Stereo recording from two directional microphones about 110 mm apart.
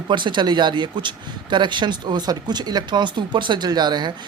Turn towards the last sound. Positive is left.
turn(degrees=-40)  # may be behind; listen again after turning